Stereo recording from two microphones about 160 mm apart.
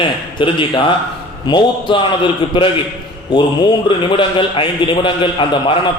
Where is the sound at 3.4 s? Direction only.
30° left (ahead or behind).